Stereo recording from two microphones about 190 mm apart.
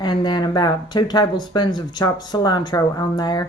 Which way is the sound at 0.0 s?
25° left (ahead or behind).